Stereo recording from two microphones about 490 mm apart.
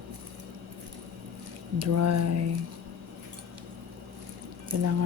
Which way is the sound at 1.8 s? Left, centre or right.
Right.